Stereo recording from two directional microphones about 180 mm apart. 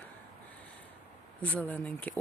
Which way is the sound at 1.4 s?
10° left (ahead or behind).